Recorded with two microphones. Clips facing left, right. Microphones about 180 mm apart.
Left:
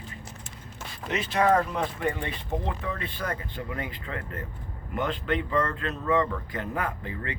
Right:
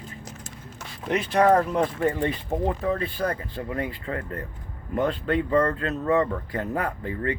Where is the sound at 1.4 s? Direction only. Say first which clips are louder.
Right 3 dB; 35° right (ahead or behind).